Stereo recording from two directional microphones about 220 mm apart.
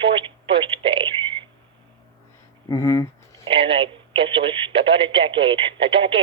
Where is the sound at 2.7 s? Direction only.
15° left (ahead or behind).